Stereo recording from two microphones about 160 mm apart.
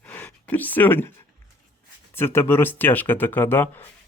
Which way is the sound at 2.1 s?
15° left (ahead or behind).